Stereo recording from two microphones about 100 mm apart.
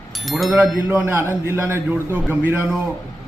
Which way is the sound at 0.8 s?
20° right (ahead or behind).